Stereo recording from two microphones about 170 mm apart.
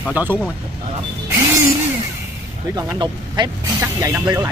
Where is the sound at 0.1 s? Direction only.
10° right (ahead or behind).